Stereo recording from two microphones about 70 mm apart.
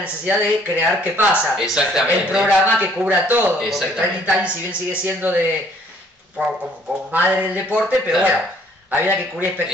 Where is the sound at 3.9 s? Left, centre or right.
Centre.